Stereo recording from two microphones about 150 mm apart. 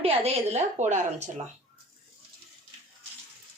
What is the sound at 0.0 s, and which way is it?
A woman's voice, 40° right (ahead or behind).